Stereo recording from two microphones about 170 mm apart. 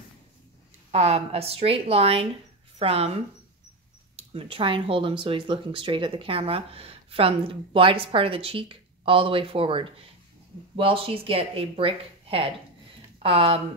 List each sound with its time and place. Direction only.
0.9 s speech: 35° right (ahead or behind)
4.3 s speech: 35° right (ahead or behind)